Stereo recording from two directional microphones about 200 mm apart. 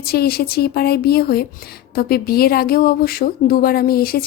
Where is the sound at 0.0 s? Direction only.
50° left (ahead or behind).